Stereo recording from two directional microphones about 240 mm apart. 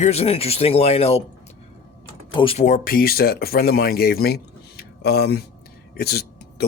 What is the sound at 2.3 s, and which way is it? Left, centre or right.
Speech, left.